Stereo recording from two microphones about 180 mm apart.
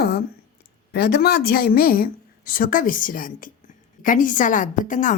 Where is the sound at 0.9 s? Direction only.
65° left (ahead or behind).